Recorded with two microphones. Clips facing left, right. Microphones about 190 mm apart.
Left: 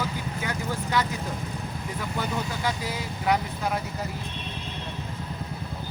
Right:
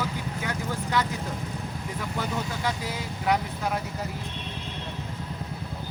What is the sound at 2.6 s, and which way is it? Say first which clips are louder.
Speech: left 1 dB; 5° left (ahead or behind).